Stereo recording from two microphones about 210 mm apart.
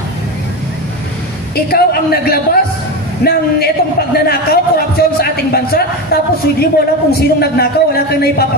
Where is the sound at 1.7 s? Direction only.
45° left (ahead or behind).